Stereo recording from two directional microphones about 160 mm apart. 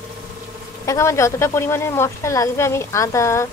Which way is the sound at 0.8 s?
20° left (ahead or behind).